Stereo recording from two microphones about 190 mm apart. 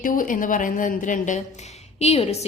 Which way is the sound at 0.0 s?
45° left (ahead or behind).